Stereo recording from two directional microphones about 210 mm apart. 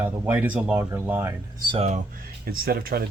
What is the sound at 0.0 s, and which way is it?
Speech, 5° right (ahead or behind).